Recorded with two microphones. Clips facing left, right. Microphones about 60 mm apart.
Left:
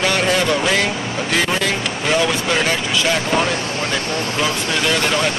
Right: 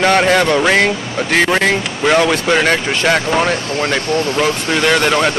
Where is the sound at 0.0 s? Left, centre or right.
Right.